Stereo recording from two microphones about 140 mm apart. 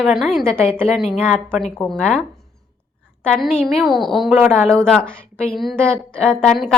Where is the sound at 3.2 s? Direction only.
5° left (ahead or behind).